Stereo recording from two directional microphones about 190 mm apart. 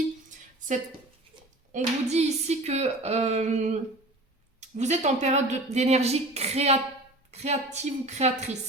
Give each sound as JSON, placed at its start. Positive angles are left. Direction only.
{"t": 1.7, "sound": "speech", "side_deg": -35}